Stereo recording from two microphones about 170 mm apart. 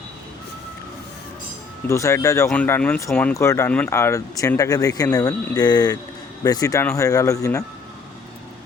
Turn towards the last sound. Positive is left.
turn(degrees=20)  # may be behind; listen again after turning